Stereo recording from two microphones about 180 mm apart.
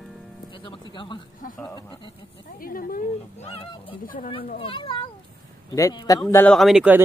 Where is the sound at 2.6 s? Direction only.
50° left (ahead or behind).